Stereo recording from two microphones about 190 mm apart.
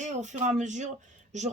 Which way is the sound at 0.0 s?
40° right (ahead or behind).